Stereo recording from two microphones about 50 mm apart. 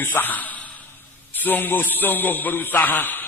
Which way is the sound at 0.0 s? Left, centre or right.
Left.